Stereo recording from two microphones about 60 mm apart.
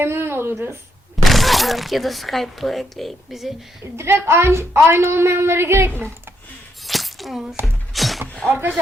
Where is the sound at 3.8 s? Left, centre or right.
Right.